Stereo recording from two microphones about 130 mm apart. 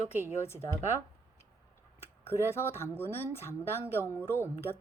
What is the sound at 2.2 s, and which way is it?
Speech, 20° left (ahead or behind).